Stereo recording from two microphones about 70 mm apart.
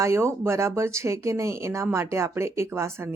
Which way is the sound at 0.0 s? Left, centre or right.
Right.